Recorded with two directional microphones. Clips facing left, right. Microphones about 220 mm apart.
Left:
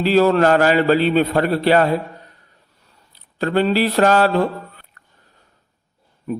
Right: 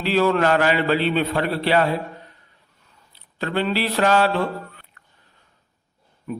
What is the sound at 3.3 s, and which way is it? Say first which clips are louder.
Speech: left 6 dB; 40° left (ahead or behind).